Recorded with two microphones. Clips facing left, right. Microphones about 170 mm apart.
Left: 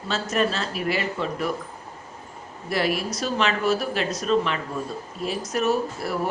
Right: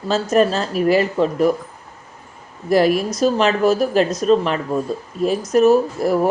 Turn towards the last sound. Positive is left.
turn(degrees=-40)  # may be behind; listen again after turning